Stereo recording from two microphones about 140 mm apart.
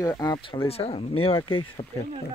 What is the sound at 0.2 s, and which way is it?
Speech, 35° left (ahead or behind).